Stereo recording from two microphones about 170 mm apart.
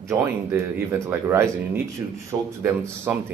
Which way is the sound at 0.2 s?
15° right (ahead or behind).